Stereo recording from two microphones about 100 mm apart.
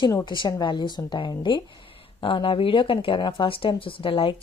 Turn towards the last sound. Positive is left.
turn(degrees=60)  # may be behind; listen again after turning